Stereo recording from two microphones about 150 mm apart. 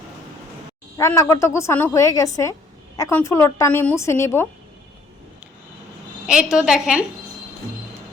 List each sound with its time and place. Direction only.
0.9 s a woman's voice: 20° left (ahead or behind)
6.2 s a woman's voice: 5° right (ahead or behind)